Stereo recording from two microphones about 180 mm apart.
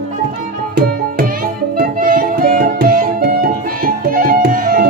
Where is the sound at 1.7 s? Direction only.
50° right (ahead or behind).